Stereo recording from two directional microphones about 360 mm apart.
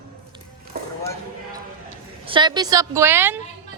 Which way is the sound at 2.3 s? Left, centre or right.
Centre.